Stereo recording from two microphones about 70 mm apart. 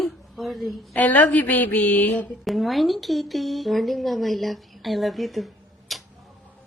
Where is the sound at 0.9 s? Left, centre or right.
Left.